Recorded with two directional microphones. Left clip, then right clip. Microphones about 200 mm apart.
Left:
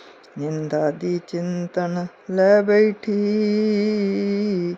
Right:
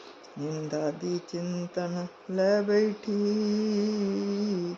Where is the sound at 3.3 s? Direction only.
20° left (ahead or behind).